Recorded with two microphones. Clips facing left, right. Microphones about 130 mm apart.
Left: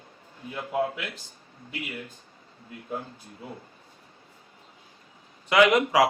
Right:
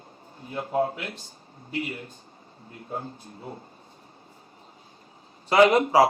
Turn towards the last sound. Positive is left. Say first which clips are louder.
# right 2 dB
turn(degrees=-35)  # may be behind; listen again after turning